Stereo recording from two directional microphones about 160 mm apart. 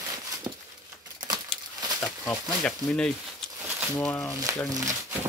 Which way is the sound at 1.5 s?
10° left (ahead or behind).